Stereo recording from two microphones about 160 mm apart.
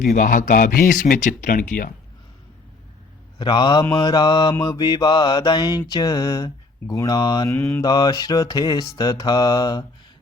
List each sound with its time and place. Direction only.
0.1 s speech: 55° left (ahead or behind)
3.3 s mantra: 30° left (ahead or behind)